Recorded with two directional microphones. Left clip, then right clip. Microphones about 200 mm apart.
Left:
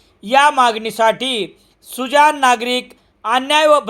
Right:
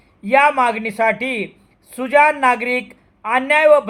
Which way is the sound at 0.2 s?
25° left (ahead or behind).